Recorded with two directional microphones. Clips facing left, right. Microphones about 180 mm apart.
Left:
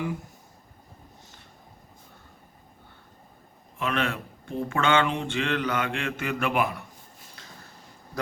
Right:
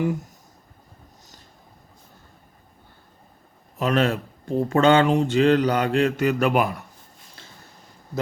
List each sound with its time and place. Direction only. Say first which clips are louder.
0.0 s speech: right 7 dB; 45° right (ahead or behind)
3.8 s speech: right 7 dB; 40° right (ahead or behind)
7.4 s a sound: right 2 dB; 30° right (ahead or behind)